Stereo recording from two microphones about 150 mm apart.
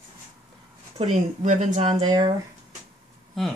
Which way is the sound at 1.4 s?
55° right (ahead or behind).